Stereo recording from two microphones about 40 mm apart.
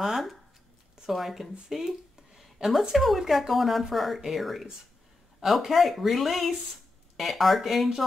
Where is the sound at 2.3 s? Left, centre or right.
Centre.